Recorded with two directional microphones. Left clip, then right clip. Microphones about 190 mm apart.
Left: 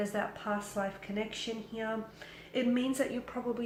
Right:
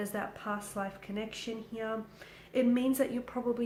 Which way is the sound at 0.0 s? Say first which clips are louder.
Left 2 dB; 40° right (ahead or behind).